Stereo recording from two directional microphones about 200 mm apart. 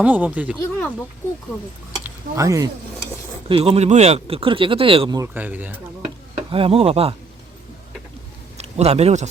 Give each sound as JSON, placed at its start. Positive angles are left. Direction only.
{"t": 0.0, "sound": "speech", "side_deg": -10}
{"t": 0.6, "sound": "speech", "side_deg": 5}
{"t": 2.0, "sound": "speech", "side_deg": -15}
{"t": 3.5, "sound": "speech", "side_deg": -30}
{"t": 6.5, "sound": "speech", "side_deg": -30}
{"t": 8.5, "sound": "speech", "side_deg": -30}